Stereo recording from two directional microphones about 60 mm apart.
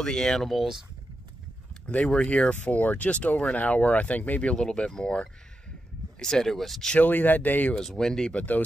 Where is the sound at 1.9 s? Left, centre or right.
Centre.